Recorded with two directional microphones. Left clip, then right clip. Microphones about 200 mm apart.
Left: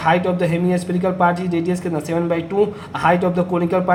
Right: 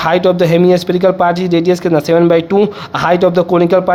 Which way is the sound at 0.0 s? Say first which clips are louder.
Right 6 dB; 55° right (ahead or behind).